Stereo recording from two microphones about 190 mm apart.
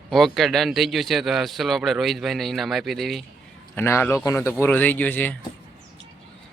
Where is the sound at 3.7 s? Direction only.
10° left (ahead or behind).